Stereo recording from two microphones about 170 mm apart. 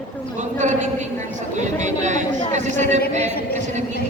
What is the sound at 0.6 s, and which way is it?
Speech, 45° right (ahead or behind).